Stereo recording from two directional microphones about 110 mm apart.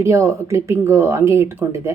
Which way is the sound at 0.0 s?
25° right (ahead or behind).